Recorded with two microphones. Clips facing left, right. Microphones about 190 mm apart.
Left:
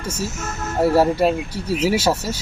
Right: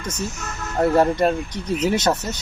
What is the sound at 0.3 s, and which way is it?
Speech, 45° left (ahead or behind).